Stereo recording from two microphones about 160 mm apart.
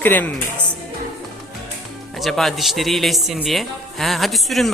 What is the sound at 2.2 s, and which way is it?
Speech, centre (ahead or behind).